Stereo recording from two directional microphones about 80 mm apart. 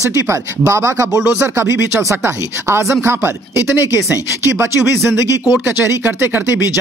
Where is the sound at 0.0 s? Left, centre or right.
Right.